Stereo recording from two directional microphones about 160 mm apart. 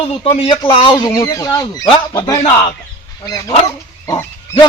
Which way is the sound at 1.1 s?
20° left (ahead or behind).